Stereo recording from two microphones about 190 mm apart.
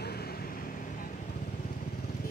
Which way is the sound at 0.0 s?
55° left (ahead or behind).